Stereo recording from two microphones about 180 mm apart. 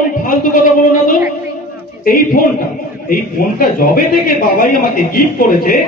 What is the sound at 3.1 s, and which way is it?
A man's voice, 55° left (ahead or behind).